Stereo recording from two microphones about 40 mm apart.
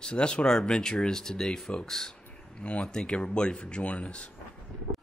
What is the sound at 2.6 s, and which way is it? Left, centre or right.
Speech, left.